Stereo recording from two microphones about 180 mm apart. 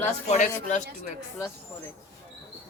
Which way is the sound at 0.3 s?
45° left (ahead or behind).